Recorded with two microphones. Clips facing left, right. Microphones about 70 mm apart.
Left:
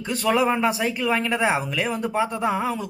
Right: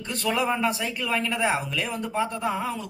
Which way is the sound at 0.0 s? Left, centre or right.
Centre.